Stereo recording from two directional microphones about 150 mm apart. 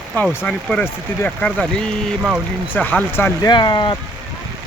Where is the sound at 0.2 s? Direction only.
5° left (ahead or behind).